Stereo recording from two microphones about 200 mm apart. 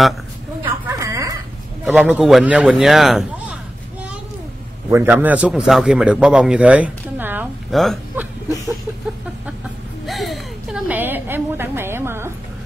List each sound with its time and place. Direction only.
0.7 s a sound: 15° right (ahead or behind)
1.9 s a man's voice: 5° right (ahead or behind)
4.9 s a man's voice: 10° right (ahead or behind)
10.0 s a woman's voice: centre (ahead or behind)